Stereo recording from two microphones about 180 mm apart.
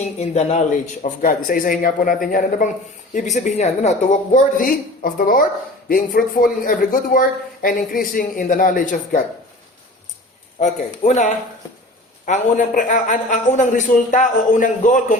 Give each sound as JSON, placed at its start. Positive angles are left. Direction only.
{"t": 0.2, "sound": "a man's voice", "side_deg": 40}
{"t": 10.6, "sound": "speech", "side_deg": 40}